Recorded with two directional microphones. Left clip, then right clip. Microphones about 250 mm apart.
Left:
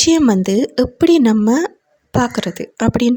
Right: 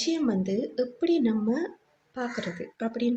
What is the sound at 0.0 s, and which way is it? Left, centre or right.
Speech, left.